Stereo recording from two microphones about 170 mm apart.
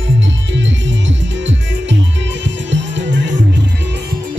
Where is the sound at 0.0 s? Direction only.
90° right.